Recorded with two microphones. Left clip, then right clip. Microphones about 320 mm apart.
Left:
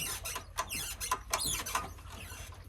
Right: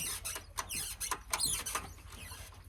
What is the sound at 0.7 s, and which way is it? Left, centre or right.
Rodents, left.